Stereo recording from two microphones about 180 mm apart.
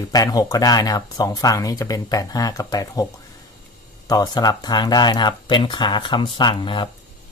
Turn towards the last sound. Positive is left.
turn(degrees=25)  # may be behind; listen again after turning